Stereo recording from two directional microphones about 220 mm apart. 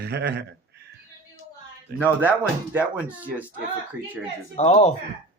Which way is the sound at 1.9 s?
10° right (ahead or behind).